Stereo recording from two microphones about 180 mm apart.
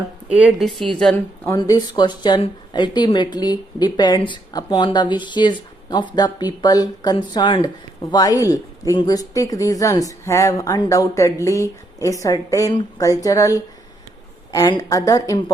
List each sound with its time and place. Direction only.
0.3 s speech: 5° right (ahead or behind)
1.5 s speech: 20° left (ahead or behind)